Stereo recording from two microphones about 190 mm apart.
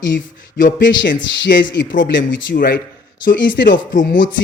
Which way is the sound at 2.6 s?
60° left (ahead or behind).